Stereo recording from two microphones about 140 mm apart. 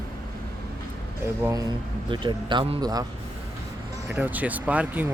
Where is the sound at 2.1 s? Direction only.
35° right (ahead or behind).